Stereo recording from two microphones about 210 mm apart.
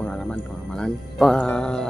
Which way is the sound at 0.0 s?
5° left (ahead or behind).